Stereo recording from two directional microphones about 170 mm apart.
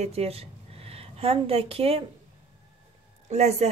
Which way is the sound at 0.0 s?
35° right (ahead or behind).